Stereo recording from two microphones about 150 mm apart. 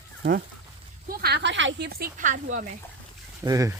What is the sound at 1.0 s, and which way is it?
Speech, 90° right.